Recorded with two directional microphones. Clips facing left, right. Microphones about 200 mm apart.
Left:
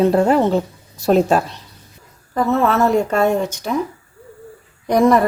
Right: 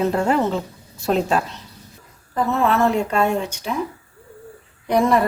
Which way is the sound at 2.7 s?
40° left (ahead or behind).